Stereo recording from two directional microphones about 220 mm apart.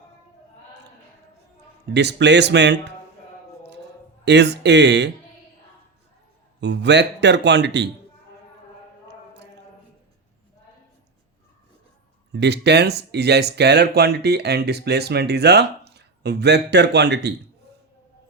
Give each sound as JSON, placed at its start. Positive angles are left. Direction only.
{"t": 1.9, "sound": "speech", "side_deg": -50}
{"t": 4.3, "sound": "speech", "side_deg": -50}
{"t": 6.6, "sound": "speech", "side_deg": -50}
{"t": 12.3, "sound": "speech", "side_deg": -50}